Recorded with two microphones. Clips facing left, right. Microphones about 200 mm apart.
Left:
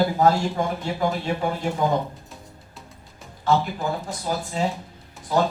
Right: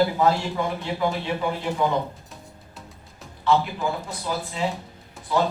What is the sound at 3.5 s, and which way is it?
Speech, 40° left (ahead or behind).